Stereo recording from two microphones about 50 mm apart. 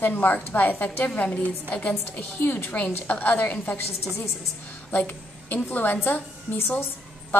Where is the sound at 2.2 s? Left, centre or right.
Left.